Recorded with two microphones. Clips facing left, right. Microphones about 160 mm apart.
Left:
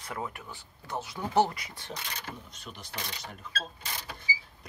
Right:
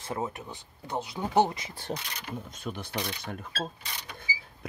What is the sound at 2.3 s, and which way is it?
Speech, 50° right (ahead or behind).